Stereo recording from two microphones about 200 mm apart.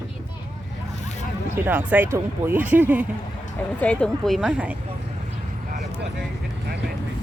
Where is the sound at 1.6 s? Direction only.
10° right (ahead or behind).